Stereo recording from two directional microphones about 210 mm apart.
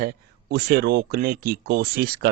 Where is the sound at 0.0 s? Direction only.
50° right (ahead or behind).